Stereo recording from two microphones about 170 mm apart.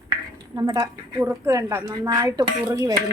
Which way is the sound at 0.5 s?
20° right (ahead or behind).